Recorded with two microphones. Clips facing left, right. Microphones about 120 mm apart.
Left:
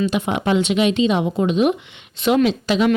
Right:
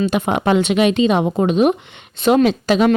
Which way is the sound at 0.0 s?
45° right (ahead or behind).